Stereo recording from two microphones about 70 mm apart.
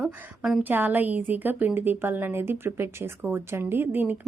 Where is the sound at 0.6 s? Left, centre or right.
Right.